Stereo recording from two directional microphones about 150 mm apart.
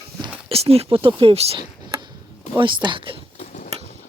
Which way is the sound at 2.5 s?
30° right (ahead or behind).